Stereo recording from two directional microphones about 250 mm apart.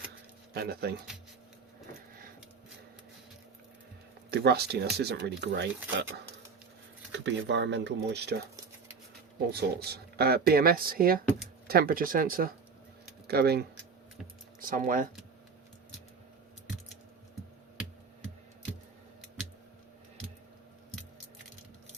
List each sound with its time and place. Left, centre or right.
0.5 s speech: right
4.3 s speech: right
7.1 s speech: right
9.5 s speech: right